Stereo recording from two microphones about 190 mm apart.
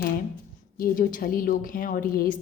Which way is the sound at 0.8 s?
45° left (ahead or behind).